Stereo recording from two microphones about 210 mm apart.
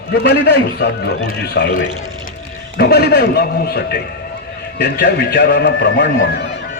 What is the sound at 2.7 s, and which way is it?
A man's voice, 50° left (ahead or behind).